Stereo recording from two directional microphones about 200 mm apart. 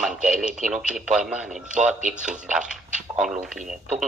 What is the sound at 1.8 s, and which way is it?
Speech, 35° right (ahead or behind).